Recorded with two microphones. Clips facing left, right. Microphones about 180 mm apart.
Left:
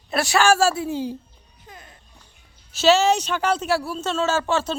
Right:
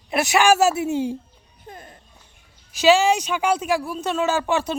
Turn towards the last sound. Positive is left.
turn(degrees=-15)  # may be behind; listen again after turning